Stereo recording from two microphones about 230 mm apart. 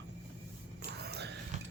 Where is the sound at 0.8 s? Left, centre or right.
Right.